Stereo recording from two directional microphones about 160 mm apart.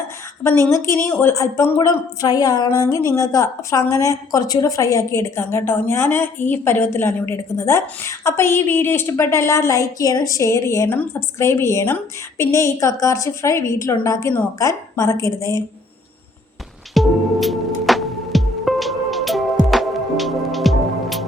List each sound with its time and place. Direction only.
0.4 s a woman's voice: 15° left (ahead or behind)
16.9 s music: centre (ahead or behind)